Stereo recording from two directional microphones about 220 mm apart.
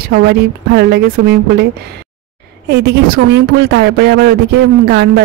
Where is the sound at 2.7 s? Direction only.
45° right (ahead or behind).